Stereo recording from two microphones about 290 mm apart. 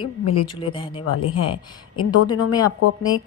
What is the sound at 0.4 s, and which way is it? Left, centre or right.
Speech, centre.